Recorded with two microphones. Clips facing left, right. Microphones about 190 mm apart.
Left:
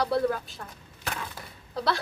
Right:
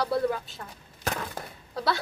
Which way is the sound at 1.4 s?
50° right (ahead or behind).